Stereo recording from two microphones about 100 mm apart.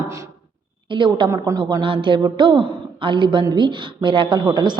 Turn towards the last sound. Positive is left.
turn(degrees=-45)  # may be behind; listen again after turning